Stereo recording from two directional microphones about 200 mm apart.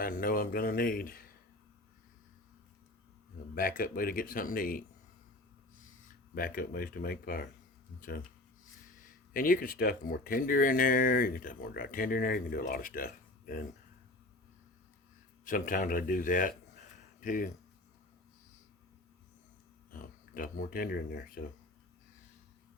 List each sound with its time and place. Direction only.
0.0 s speech: 45° left (ahead or behind)
3.5 s speech: 45° left (ahead or behind)
6.3 s speech: 45° left (ahead or behind)
9.3 s speech: 45° left (ahead or behind)
15.4 s speech: 40° left (ahead or behind)
19.9 s speech: 45° left (ahead or behind)